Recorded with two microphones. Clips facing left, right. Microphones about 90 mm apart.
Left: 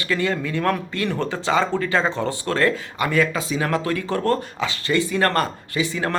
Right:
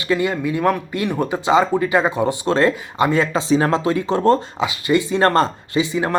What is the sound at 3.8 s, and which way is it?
Speech, 20° right (ahead or behind).